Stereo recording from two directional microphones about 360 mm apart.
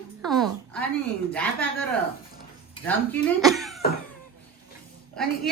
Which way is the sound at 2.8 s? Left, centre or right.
Centre.